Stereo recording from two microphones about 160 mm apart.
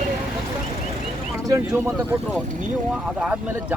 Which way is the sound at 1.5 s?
15° right (ahead or behind).